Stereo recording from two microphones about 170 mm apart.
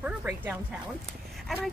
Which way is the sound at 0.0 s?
10° right (ahead or behind).